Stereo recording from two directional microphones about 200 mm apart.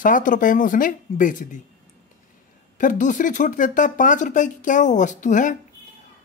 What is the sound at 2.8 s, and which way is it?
A woman's voice, 40° left (ahead or behind).